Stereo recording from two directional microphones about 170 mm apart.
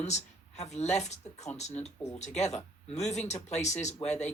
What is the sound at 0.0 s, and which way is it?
Speech, 40° left (ahead or behind).